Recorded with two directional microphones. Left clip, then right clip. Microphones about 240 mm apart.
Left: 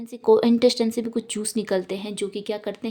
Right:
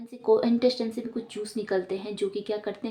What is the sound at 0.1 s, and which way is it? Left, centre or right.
Speech, left.